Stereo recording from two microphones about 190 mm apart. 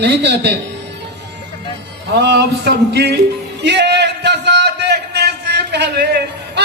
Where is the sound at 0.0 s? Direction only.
65° right (ahead or behind).